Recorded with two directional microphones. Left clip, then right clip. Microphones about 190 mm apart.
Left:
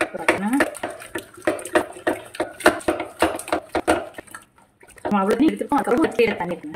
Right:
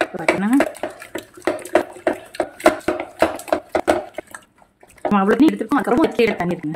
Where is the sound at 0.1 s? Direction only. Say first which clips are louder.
Right 3 dB; centre (ahead or behind).